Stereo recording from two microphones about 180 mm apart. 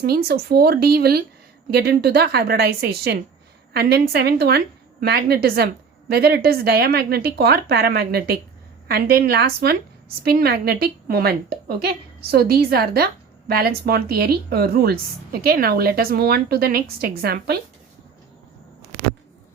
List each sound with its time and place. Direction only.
0.0 s speech: 65° right (ahead or behind)